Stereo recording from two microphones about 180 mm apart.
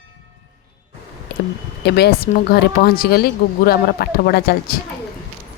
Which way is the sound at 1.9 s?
65° left (ahead or behind).